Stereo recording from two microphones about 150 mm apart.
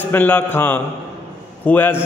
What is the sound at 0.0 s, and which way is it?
A man's voice, 10° left (ahead or behind).